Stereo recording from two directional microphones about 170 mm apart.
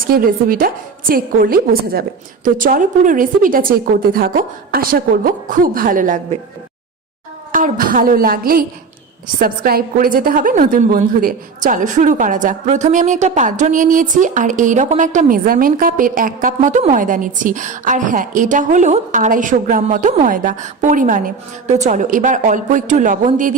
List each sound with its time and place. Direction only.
0.1 s a woman's voice: 55° right (ahead or behind)
7.5 s a woman's voice: 55° right (ahead or behind)
16.6 s a woman's voice: 40° right (ahead or behind)